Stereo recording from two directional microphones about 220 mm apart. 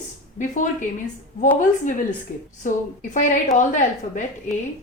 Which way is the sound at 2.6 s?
35° left (ahead or behind).